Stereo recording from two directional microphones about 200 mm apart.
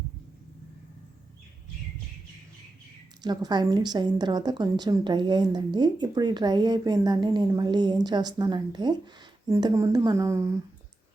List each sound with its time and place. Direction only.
3.2 s a woman's voice: 20° right (ahead or behind)